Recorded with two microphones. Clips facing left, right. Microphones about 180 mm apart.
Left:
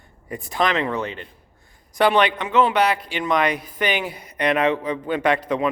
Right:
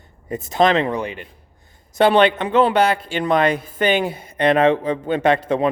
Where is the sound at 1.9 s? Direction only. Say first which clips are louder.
Right 4 dB; 25° right (ahead or behind).